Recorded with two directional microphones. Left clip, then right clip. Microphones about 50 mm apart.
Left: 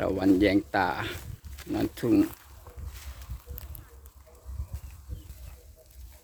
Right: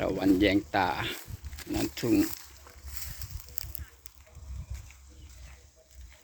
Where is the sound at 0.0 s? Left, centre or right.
Left.